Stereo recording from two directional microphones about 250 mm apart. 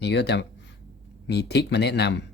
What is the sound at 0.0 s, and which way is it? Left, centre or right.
Speech, left.